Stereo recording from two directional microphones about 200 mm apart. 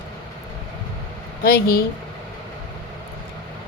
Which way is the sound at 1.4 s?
50° left (ahead or behind).